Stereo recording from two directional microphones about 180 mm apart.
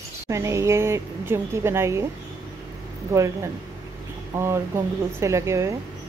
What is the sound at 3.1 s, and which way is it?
Speech, 15° right (ahead or behind).